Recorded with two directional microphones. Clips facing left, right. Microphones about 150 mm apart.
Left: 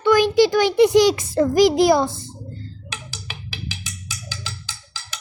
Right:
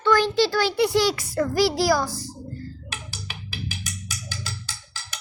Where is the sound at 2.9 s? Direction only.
90° left.